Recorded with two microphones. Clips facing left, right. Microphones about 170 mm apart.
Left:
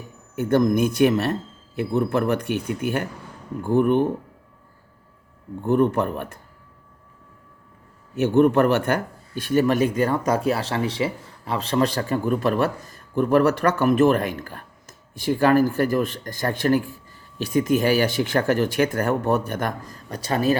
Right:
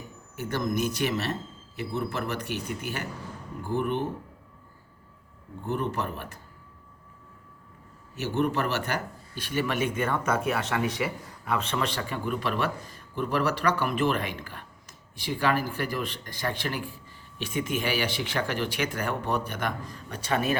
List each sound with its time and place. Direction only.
0.3 s speech: 55° left (ahead or behind)
5.6 s speech: 55° left (ahead or behind)
8.1 s speech: 55° left (ahead or behind); by 20.6 s 35° left (ahead or behind)